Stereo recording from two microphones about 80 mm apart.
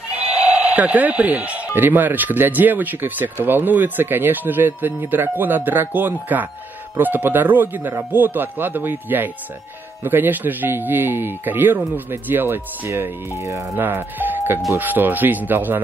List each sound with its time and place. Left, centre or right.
0.1 s sheep: centre
1.8 s speech: right
13.4 s speech: right
13.7 s speech: right